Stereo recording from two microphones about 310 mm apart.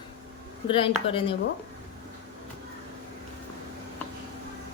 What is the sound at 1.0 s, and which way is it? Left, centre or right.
Speech, centre.